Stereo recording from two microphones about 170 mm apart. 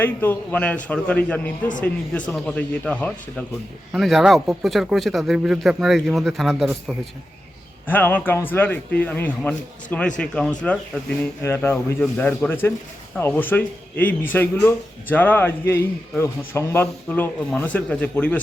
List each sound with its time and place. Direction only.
0.0 s a man's voice: 10° left (ahead or behind)
7.9 s a man's voice: 10° left (ahead or behind)